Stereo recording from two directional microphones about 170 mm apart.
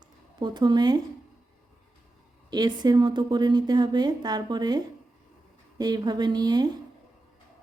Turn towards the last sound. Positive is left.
turn(degrees=-25)  # may be behind; listen again after turning